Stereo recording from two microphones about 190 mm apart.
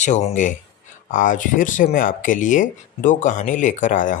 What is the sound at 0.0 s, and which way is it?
Speech, 35° left (ahead or behind).